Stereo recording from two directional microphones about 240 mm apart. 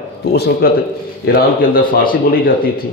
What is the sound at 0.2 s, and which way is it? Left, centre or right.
A man's voice, left.